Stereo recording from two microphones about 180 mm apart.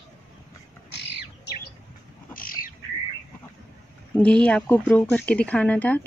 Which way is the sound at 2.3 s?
50° left (ahead or behind).